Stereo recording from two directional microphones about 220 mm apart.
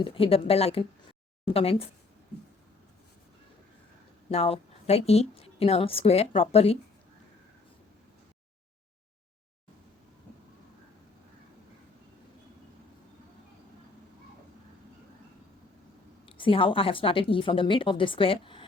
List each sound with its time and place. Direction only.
0.0 s a woman's voice: 25° left (ahead or behind)
4.3 s a woman's voice: 25° left (ahead or behind)
16.2 s a woman's voice: 25° left (ahead or behind)